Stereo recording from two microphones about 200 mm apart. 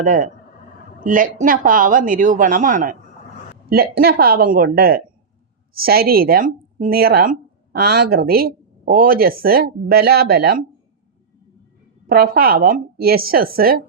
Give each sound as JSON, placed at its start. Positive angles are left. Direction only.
{"t": 0.0, "sound": "speech", "side_deg": -40}
{"t": 12.0, "sound": "speech", "side_deg": -50}